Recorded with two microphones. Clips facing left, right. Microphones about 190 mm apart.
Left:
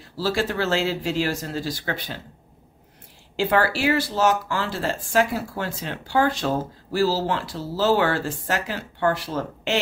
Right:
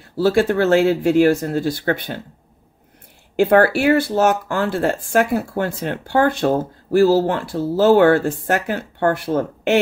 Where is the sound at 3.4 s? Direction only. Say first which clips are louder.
Right 7 dB; 55° right (ahead or behind).